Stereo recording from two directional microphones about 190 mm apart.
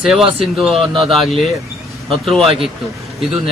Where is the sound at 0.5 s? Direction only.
Centre (ahead or behind).